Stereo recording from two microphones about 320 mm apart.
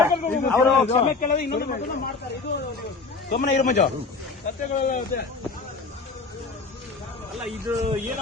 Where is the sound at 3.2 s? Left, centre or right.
Left.